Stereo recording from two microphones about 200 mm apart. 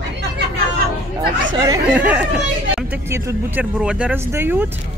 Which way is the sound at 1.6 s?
20° right (ahead or behind).